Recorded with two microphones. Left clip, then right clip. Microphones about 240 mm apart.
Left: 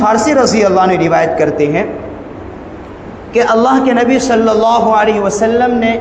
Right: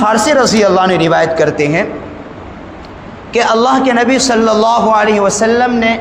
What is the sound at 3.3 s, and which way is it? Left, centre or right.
A man's voice, right.